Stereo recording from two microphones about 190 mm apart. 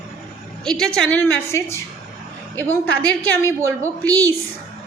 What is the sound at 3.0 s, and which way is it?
Speech, 5° left (ahead or behind).